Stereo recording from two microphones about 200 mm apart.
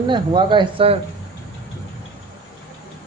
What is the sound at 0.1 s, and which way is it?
Speech, 25° right (ahead or behind).